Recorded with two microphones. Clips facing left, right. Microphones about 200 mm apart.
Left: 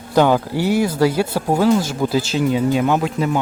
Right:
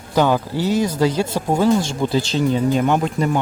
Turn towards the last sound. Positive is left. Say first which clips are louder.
# even
turn(degrees=5)  # may be behind; listen again after turning